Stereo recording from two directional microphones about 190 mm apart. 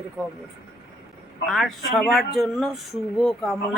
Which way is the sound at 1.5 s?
Centre (ahead or behind).